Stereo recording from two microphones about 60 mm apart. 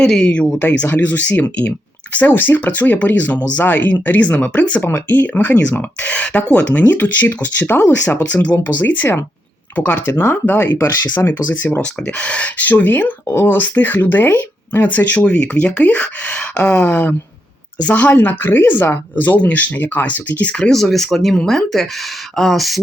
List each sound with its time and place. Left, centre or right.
0.0 s speech: centre
0.9 s speech: left
4.8 s speech: left
8.2 s speech: left
13.2 s speech: left
13.5 s speech: left
18.1 s speech: left
20.7 s speech: centre